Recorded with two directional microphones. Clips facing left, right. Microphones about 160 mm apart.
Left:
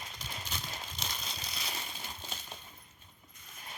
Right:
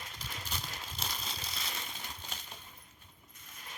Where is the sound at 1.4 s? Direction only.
25° right (ahead or behind).